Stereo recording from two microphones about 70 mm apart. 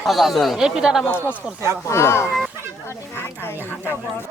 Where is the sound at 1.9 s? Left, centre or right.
Left.